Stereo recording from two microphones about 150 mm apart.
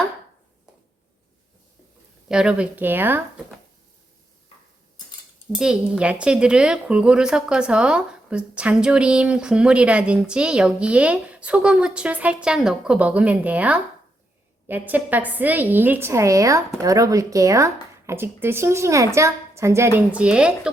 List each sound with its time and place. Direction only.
2.3 s speech: 5° right (ahead or behind)
5.5 s speech: 5° right (ahead or behind)